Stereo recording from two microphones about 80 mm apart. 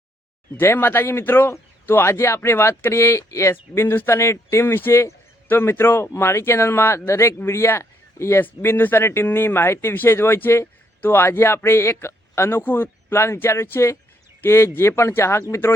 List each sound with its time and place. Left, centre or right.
0.5 s speech: left